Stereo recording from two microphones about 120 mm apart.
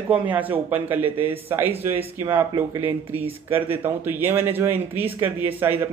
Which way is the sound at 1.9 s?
45° right (ahead or behind).